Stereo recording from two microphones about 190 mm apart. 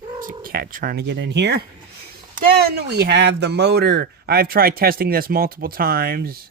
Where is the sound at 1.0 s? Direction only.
65° right (ahead or behind).